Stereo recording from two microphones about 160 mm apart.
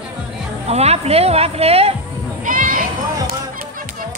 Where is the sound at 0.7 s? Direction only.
40° right (ahead or behind).